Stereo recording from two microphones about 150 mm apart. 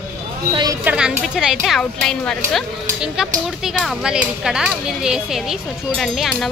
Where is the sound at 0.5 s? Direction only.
30° right (ahead or behind).